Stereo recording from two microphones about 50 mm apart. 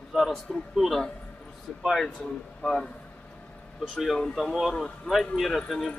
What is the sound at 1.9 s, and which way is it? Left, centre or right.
Speech, centre.